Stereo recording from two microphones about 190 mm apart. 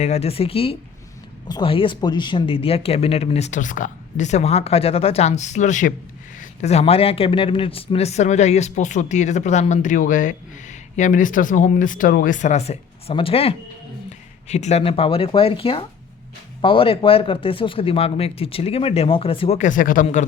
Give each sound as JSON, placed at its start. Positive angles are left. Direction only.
{"t": 0.0, "sound": "a man's voice", "side_deg": 35}